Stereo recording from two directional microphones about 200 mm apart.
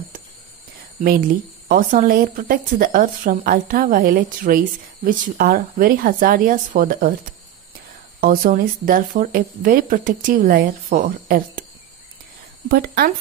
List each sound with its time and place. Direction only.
1.7 s a woman's voice: 45° right (ahead or behind)
8.2 s a woman's voice: 45° right (ahead or behind)
12.6 s a woman's voice: 50° right (ahead or behind)